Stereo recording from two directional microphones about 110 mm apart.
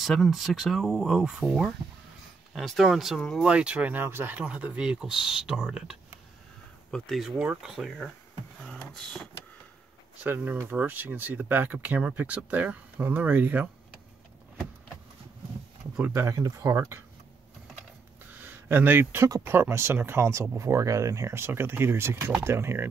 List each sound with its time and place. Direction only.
0.0 s speech: centre (ahead or behind)
3.4 s speech: 10° right (ahead or behind)
8.6 s a sound: 5° left (ahead or behind)
10.2 s speech: 20° right (ahead or behind)
16.1 s speech: 30° right (ahead or behind)
18.4 s speech: 20° right (ahead or behind)